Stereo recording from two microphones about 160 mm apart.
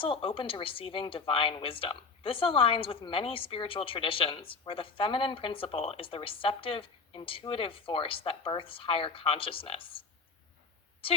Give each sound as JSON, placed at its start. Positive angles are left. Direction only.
{"t": 0.0, "sound": "speech", "side_deg": 35}